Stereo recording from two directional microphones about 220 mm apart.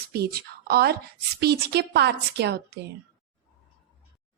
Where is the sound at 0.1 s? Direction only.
45° right (ahead or behind).